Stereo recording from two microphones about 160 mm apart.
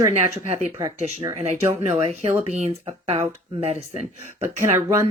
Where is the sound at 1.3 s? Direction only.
40° right (ahead or behind).